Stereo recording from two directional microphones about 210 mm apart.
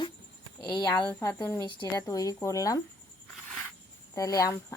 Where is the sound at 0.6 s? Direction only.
20° left (ahead or behind).